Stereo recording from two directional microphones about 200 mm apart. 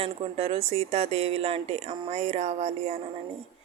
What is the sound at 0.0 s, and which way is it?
Speech, 30° right (ahead or behind).